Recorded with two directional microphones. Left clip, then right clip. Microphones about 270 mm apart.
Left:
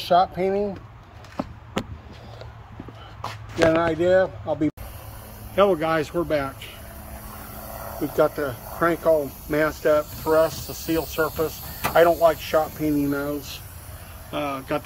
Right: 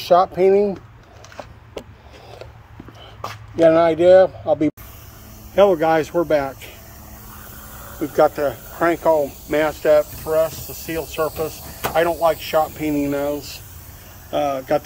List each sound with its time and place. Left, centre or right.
0.0 s speech: right
3.7 s speech: right
5.5 s speech: centre
8.2 s speech: centre
14.3 s speech: centre